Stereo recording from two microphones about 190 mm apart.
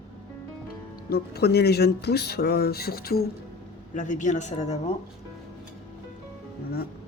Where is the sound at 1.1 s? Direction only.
55° left (ahead or behind).